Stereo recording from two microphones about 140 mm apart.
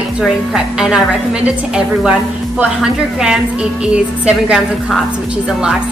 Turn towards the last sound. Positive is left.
turn(degrees=-5)  # may be behind; listen again after turning